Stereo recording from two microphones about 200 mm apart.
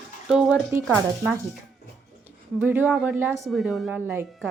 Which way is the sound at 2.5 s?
10° right (ahead or behind).